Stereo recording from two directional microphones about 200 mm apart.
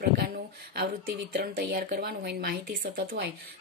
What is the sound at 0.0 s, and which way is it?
Speech, 50° right (ahead or behind).